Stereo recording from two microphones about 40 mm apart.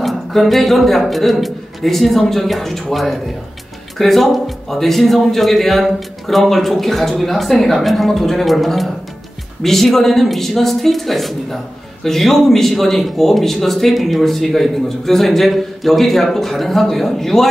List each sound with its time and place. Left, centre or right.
0.0 s speech: centre